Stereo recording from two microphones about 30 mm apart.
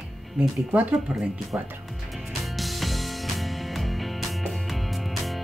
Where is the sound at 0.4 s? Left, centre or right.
Right.